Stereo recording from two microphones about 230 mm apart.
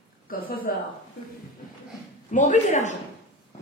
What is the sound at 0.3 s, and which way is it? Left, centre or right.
Speech, left.